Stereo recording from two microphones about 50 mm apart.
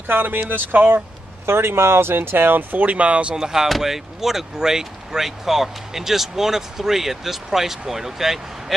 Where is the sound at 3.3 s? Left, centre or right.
Centre.